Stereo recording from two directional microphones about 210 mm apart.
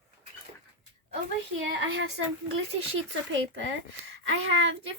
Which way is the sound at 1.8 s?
65° right (ahead or behind).